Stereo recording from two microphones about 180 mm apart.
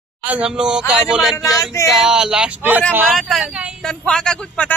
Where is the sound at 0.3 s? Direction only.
5° right (ahead or behind).